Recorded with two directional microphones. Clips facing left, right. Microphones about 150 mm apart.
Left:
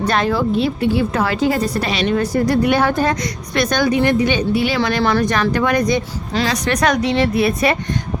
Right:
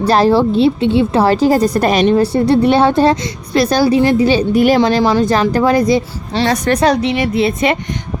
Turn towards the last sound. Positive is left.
turn(degrees=-25)  # may be behind; listen again after turning